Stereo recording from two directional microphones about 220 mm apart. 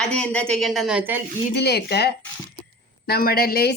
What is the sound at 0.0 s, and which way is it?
A woman's voice, 5° left (ahead or behind).